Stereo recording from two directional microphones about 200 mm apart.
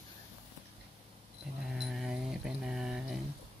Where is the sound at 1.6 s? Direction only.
Centre (ahead or behind).